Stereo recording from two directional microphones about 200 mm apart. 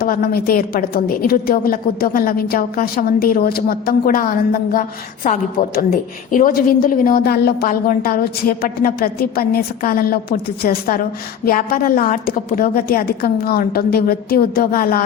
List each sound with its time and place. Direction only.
0.0 s a woman's voice: 50° left (ahead or behind)